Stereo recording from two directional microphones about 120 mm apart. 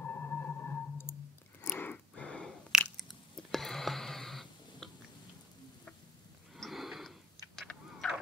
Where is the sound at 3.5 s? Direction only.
Centre (ahead or behind).